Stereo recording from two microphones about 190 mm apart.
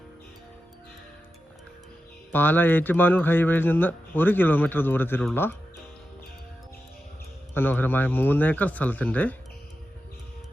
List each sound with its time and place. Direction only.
2.3 s speech: 10° left (ahead or behind)
7.5 s speech: 10° left (ahead or behind)